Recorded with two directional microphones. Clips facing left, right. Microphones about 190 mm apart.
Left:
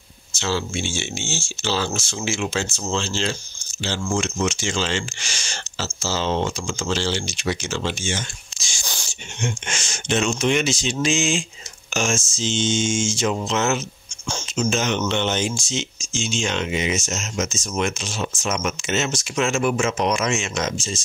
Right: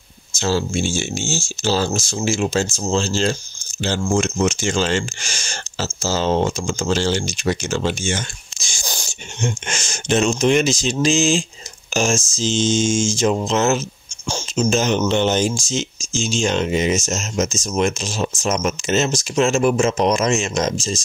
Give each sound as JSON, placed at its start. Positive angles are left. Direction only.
{"t": 0.3, "sound": "speech", "side_deg": -40}